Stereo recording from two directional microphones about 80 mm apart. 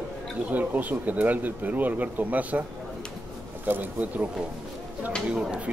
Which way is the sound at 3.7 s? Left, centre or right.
Right.